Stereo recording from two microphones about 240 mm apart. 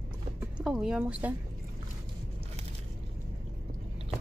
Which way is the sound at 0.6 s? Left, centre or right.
Centre.